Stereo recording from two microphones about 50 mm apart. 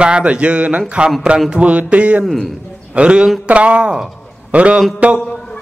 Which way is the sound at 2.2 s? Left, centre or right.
Centre.